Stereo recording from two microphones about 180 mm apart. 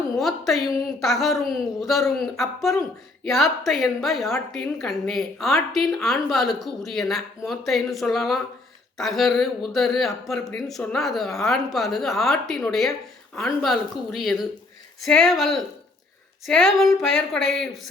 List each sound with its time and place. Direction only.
0.2 s a woman's voice: centre (ahead or behind)